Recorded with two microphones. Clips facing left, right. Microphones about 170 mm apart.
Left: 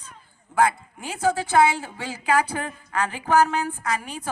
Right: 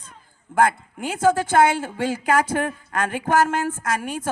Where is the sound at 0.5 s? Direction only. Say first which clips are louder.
Right 2 dB; 55° right (ahead or behind).